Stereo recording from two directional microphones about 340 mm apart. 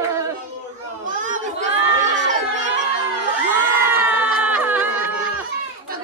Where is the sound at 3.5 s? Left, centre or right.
Centre.